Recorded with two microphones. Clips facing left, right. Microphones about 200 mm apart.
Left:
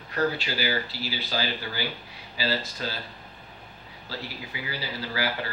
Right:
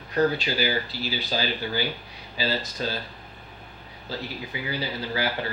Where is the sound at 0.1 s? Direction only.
20° right (ahead or behind).